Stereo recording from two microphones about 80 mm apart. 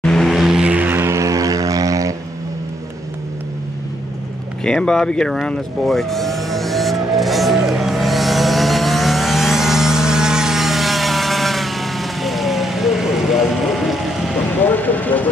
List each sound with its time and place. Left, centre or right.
0.0 s vehicle: centre
0.3 s vehicle: centre
0.7 s vehicle: right
1.1 s vehicle: right
4.6 s vehicle: centre
14.6 s vehicle: left